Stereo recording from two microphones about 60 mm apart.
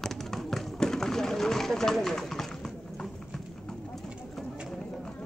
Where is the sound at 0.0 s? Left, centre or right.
Centre.